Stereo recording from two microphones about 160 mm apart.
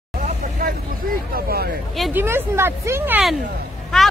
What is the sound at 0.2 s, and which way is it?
Vehicle, 55° right (ahead or behind).